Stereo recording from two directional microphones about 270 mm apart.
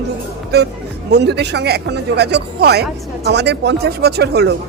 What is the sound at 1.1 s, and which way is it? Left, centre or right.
Speech, right.